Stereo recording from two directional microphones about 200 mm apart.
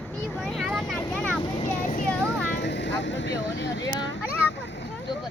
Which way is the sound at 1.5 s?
35° left (ahead or behind).